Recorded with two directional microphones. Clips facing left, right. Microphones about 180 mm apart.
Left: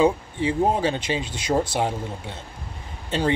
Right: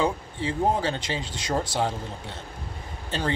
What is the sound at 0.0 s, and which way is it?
Speech, 20° left (ahead or behind).